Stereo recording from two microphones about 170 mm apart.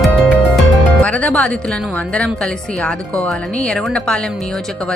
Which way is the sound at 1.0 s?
5° left (ahead or behind).